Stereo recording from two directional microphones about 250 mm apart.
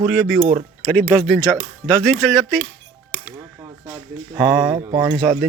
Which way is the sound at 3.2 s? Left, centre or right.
Centre.